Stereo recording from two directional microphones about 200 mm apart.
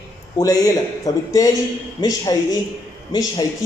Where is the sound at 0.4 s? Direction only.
20° left (ahead or behind).